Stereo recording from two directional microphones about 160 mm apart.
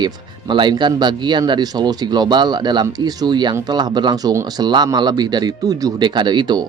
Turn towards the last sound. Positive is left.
turn(degrees=-30)  # may be behind; listen again after turning